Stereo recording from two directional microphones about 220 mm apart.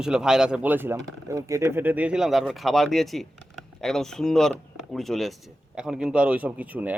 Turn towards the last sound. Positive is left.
turn(degrees=-5)  # may be behind; listen again after turning